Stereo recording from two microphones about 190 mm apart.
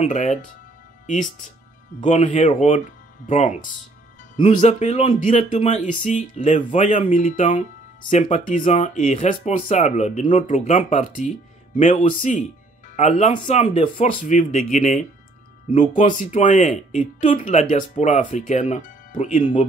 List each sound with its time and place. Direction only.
0.0 s speech: 40° left (ahead or behind)